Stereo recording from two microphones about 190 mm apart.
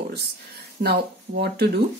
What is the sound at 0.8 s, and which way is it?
Speech, 55° right (ahead or behind).